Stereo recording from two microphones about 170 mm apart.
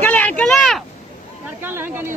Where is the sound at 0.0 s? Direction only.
10° left (ahead or behind).